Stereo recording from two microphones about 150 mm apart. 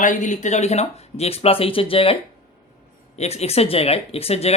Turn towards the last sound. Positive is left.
turn(degrees=45)  # may be behind; listen again after turning